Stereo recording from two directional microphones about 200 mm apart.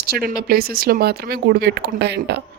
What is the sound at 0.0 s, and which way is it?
Speech, 50° right (ahead or behind).